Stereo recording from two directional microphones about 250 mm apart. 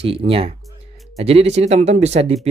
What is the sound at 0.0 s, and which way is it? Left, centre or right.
Speech, right.